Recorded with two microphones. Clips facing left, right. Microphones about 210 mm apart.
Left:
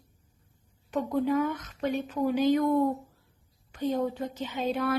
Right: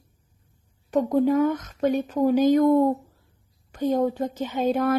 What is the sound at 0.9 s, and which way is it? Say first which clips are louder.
Speech: right 6 dB; 45° right (ahead or behind).